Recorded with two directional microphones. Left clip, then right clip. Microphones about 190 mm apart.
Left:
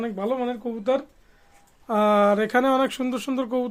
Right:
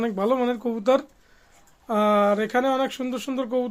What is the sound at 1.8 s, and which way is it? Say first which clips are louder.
Speech: left 1 dB; 5° left (ahead or behind).